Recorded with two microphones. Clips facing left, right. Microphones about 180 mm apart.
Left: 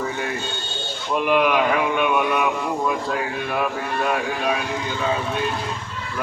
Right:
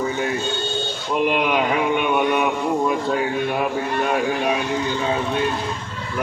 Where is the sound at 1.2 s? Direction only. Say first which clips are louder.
Left 1 dB; 25° right (ahead or behind).